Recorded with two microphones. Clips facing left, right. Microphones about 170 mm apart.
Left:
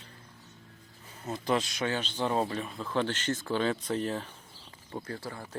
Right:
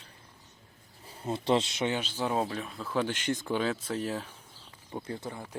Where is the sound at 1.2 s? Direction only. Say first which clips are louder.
Right 2 dB; 30° right (ahead or behind).